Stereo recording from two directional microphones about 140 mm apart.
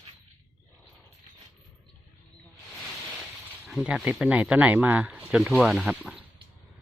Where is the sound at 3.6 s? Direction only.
5° right (ahead or behind).